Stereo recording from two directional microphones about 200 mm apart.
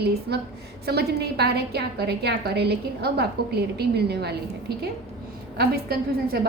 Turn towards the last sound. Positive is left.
turn(degrees=-50)  # may be behind; listen again after turning